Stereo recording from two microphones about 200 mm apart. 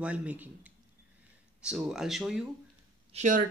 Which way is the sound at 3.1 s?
40° right (ahead or behind).